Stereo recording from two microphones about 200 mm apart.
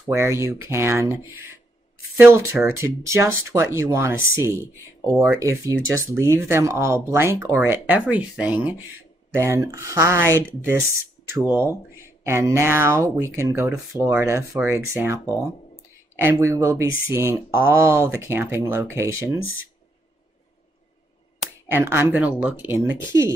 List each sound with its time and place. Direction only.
0.1 s speech: 15° right (ahead or behind)
21.6 s speech: 10° right (ahead or behind)